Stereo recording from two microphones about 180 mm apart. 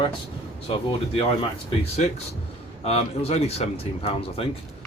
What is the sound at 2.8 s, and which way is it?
Speech, 35° left (ahead or behind).